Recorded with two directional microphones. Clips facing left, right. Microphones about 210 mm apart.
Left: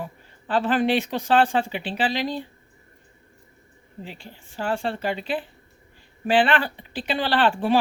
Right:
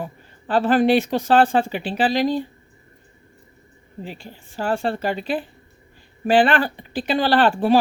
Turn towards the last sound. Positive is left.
turn(degrees=-40)  # may be behind; listen again after turning